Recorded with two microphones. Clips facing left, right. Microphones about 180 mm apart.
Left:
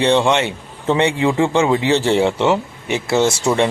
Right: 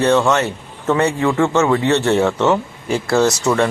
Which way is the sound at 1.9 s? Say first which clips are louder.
Even; 30° left (ahead or behind).